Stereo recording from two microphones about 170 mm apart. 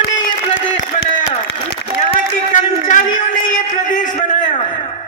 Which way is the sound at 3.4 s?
50° left (ahead or behind).